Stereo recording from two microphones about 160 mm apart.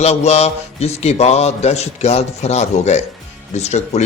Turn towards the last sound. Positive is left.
turn(degrees=45)  # may be behind; listen again after turning